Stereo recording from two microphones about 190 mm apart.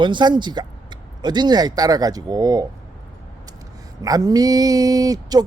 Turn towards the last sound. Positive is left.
turn(degrees=-20)  # may be behind; listen again after turning